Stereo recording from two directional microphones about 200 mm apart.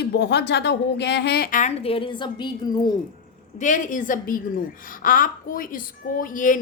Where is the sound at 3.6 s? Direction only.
40° left (ahead or behind).